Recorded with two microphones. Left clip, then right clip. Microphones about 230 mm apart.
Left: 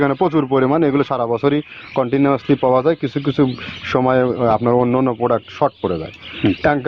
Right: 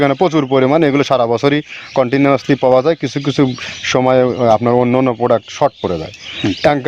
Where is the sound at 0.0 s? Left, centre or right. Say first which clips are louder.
Right 3 dB; right.